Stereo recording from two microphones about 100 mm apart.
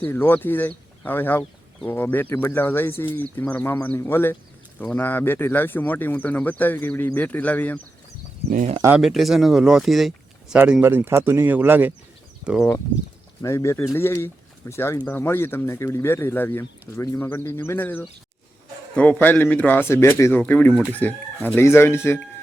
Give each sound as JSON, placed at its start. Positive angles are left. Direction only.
{"t": 0.1, "sound": "speech", "side_deg": 20}
{"t": 9.0, "sound": "speech", "side_deg": 0}
{"t": 10.5, "sound": "speech", "side_deg": -10}
{"t": 13.4, "sound": "speech", "side_deg": 30}